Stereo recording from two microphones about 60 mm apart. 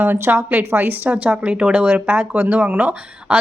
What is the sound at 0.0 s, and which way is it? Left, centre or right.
Speech, right.